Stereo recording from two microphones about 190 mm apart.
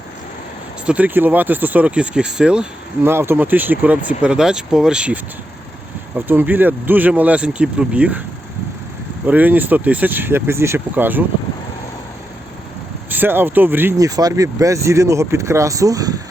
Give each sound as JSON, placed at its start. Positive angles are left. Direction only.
{"t": 0.9, "sound": "speech", "side_deg": -5}
{"t": 9.2, "sound": "speech", "side_deg": -10}
{"t": 13.1, "sound": "speech", "side_deg": -10}